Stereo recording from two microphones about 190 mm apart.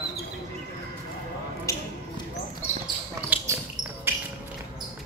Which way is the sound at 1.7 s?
15° left (ahead or behind).